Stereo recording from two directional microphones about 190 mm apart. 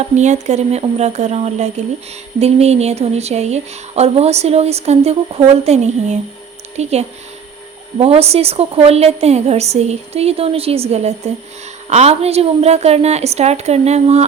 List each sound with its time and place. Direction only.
0.0 s speech: 35° right (ahead or behind)
7.9 s speech: 30° right (ahead or behind)